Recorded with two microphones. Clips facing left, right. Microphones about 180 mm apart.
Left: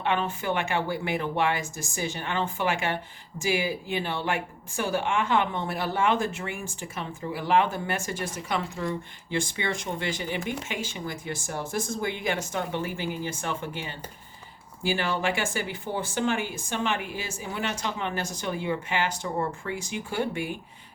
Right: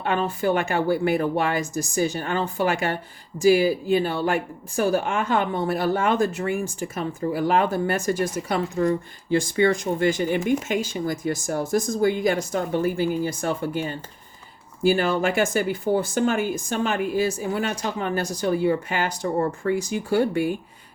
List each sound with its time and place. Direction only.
0.0 s speech: 40° right (ahead or behind)